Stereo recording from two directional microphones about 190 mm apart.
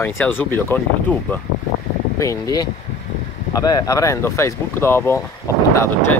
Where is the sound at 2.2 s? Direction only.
20° left (ahead or behind).